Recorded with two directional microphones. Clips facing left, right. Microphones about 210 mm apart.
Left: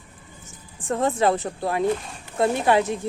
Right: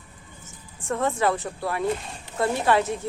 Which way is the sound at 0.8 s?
25° left (ahead or behind).